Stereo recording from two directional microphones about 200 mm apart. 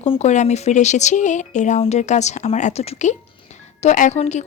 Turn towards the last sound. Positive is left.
turn(degrees=35)  # may be behind; listen again after turning